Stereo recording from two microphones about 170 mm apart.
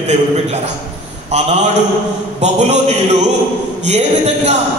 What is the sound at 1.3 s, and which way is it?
A man's voice, 40° right (ahead or behind).